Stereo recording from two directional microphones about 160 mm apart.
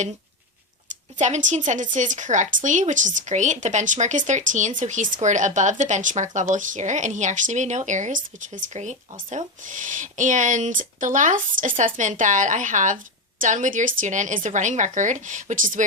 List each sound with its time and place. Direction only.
1.1 s speech: 50° right (ahead or behind)